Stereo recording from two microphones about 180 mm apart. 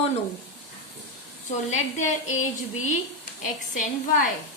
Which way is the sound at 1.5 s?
40° left (ahead or behind).